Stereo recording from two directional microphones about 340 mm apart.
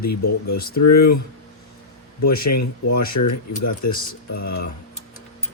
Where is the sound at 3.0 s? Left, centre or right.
Left.